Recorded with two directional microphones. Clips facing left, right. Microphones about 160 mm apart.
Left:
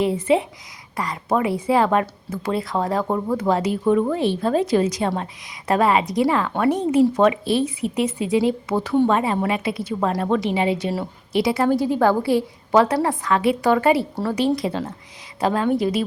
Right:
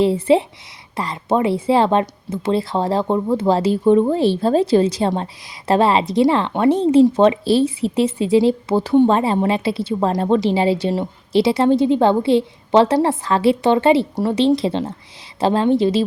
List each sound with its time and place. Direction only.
0.0 s a woman's voice: 30° right (ahead or behind)